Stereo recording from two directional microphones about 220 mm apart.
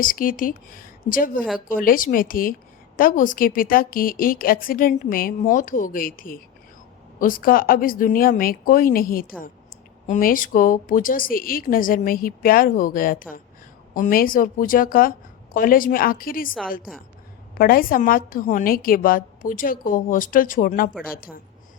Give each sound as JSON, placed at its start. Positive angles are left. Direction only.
{"t": 0.0, "sound": "a woman's voice", "side_deg": 40}
{"t": 17.6, "sound": "a woman's voice", "side_deg": 40}